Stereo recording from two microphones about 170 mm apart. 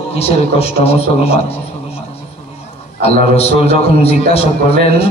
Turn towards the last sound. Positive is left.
turn(degrees=35)  # may be behind; listen again after turning